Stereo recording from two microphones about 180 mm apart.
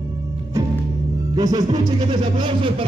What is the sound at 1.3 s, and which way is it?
Music, 20° right (ahead or behind).